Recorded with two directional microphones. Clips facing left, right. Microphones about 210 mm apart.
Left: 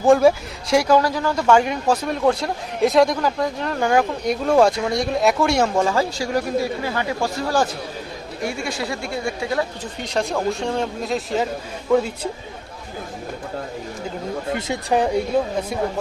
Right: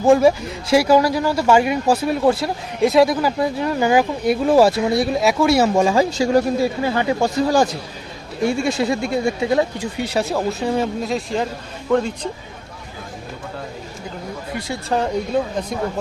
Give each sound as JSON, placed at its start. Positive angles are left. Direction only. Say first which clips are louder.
{"t": 0.0, "sound": "speech", "louder": "right 1 dB", "side_deg": 0}
{"t": 9.8, "sound": "speech", "louder": "right 3 dB", "side_deg": -5}
{"t": 14.5, "sound": "speech", "louder": "left 1 dB", "side_deg": 15}